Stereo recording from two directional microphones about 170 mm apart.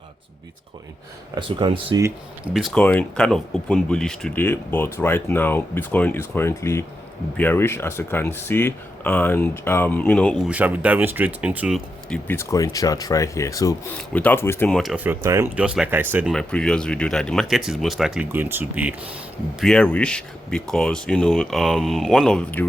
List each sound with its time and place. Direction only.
1.4 s speech: 30° right (ahead or behind)
2.5 s speech: centre (ahead or behind)
10.5 s speech: 10° right (ahead or behind)
12.0 s speech: 5° left (ahead or behind)
12.4 s speech: 15° left (ahead or behind)
14.1 s speech: 10° left (ahead or behind)
14.8 s speech: 5° right (ahead or behind)
15.5 s speech: 5° right (ahead or behind)
16.3 s speech: 5° left (ahead or behind)
19.5 s speech: 5° left (ahead or behind)